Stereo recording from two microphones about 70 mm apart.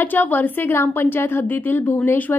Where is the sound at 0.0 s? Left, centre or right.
Left.